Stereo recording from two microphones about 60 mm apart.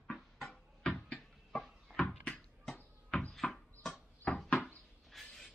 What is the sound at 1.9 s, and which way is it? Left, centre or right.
Basketball bounce, centre.